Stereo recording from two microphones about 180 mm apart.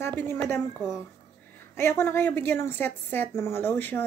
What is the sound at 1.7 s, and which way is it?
A woman's voice, 15° left (ahead or behind).